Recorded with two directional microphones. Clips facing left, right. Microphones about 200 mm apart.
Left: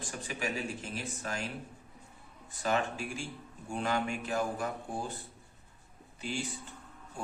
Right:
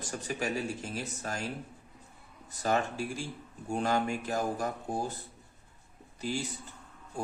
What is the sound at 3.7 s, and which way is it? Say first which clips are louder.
A man's voice: right 3 dB; 40° right (ahead or behind).